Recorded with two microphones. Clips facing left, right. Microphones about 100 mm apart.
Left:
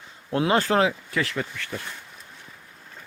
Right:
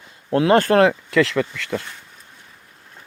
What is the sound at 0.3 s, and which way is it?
Speech, 70° right (ahead or behind).